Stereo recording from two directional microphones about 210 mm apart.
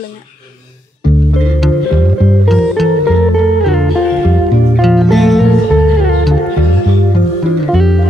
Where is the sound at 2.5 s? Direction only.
Centre (ahead or behind).